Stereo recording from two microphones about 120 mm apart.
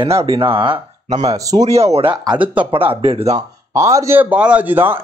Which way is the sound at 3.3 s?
25° right (ahead or behind).